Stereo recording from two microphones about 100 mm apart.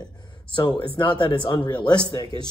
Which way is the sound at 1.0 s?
55° left (ahead or behind).